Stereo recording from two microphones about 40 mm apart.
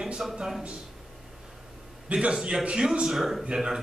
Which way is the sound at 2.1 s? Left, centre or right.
Right.